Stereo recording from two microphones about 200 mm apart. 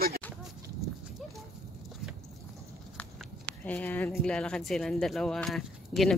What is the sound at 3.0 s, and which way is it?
Speech, 5° left (ahead or behind).